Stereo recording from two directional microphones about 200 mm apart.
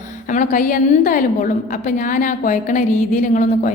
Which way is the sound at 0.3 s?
40° left (ahead or behind).